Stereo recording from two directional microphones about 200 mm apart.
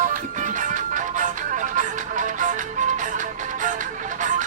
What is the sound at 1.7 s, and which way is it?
Music, 40° right (ahead or behind).